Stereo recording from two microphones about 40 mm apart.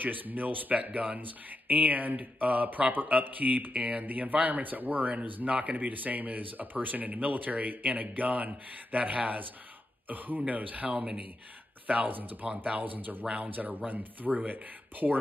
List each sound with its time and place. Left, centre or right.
0.0 s speech: right
11.0 s speech: right
12.7 s speech: right